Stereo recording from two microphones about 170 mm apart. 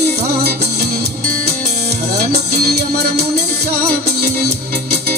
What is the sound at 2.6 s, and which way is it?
Music, 70° right (ahead or behind).